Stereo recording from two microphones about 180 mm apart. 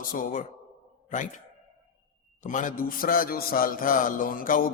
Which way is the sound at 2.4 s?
45° left (ahead or behind).